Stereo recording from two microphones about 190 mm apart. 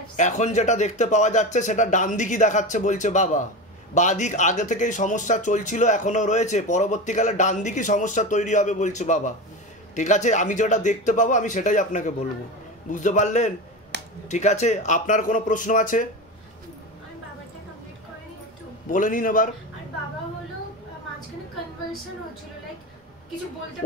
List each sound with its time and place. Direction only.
0.1 s speech: 40° left (ahead or behind)
18.9 s speech: 45° left (ahead or behind)